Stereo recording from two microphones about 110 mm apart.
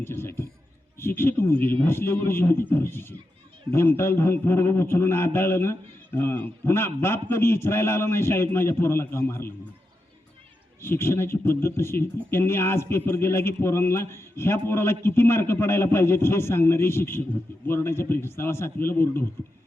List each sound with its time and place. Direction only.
0.0 s a sound: 20° left (ahead or behind)
0.9 s speech: 20° left (ahead or behind)
10.8 s speech: 20° left (ahead or behind)